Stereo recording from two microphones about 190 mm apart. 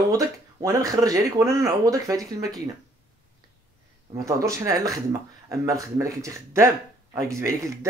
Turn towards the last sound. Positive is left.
turn(degrees=-15)  # may be behind; listen again after turning